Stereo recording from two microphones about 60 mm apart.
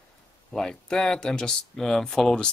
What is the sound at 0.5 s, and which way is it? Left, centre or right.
A man's voice, centre.